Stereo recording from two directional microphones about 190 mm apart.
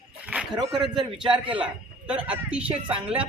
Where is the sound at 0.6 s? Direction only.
Centre (ahead or behind).